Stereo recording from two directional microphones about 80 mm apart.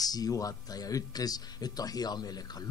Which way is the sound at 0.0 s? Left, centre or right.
Left.